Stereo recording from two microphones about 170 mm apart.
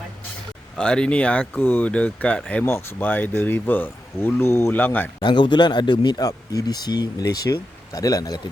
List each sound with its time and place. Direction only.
0.8 s speech: 5° left (ahead or behind)
5.2 s speech: 25° left (ahead or behind)